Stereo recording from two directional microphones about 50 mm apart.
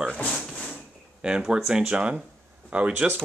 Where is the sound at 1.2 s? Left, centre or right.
Centre.